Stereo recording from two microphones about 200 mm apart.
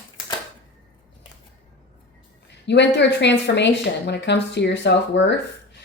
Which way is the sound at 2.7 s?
60° left (ahead or behind).